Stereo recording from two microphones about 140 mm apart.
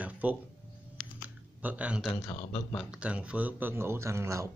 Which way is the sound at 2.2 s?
30° left (ahead or behind).